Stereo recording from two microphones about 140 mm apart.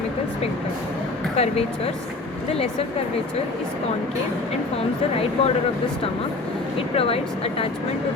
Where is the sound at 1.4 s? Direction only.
50° left (ahead or behind).